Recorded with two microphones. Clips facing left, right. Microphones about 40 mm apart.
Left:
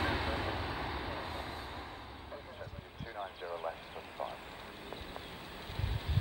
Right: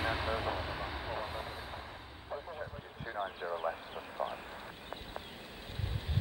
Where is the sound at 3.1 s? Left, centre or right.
Right.